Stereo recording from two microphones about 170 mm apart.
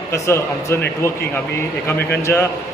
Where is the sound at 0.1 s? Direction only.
15° left (ahead or behind).